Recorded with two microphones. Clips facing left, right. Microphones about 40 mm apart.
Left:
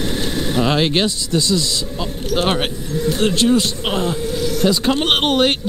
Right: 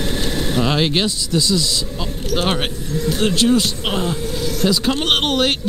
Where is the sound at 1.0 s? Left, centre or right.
Left.